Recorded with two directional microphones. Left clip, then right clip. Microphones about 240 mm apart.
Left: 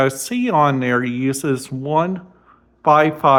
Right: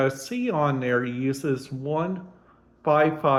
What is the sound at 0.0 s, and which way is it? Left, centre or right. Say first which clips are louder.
Speech: left 6 dB; left.